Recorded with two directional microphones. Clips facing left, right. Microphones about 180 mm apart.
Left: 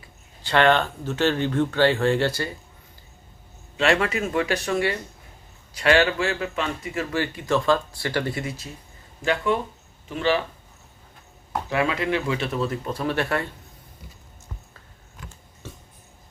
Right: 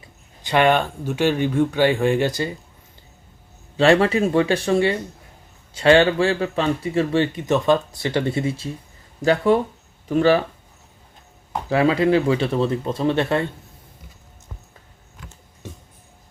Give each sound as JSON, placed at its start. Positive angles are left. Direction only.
{"t": 0.4, "sound": "speech", "side_deg": -15}
{"t": 3.8, "sound": "speech", "side_deg": -30}
{"t": 11.7, "sound": "speech", "side_deg": -30}
{"t": 15.6, "sound": "a sound", "side_deg": -15}